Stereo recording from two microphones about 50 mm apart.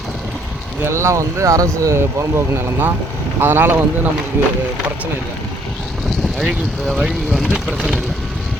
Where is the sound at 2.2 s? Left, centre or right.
Right.